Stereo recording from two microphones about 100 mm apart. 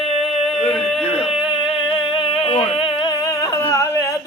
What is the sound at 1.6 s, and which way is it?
Music, 60° left (ahead or behind).